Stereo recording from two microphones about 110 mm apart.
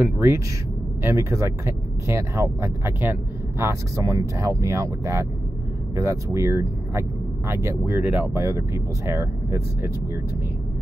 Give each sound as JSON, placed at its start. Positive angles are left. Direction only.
{"t": 0.0, "sound": "speech", "side_deg": -20}